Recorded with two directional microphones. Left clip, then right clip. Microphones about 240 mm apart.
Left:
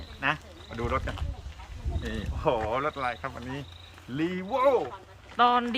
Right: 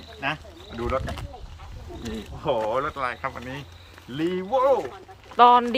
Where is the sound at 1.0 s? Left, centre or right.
Right.